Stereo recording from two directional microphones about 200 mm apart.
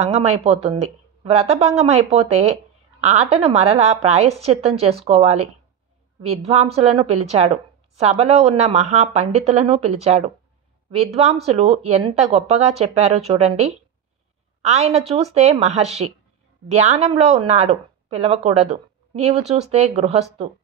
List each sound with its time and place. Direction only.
0.0 s a woman's voice: 30° right (ahead or behind)
11.4 s a woman's voice: 30° right (ahead or behind)